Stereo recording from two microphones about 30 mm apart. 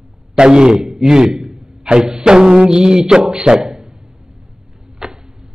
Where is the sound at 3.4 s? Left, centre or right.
Right.